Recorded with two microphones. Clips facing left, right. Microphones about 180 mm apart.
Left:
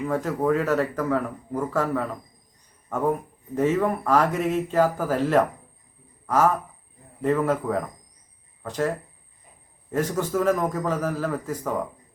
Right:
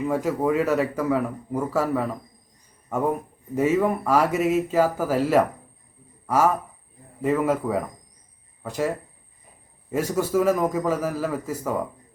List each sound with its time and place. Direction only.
0.0 s speech: 10° right (ahead or behind)
9.9 s speech: 10° right (ahead or behind)